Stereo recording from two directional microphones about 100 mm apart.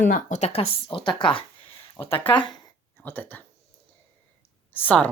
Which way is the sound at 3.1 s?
20° left (ahead or behind).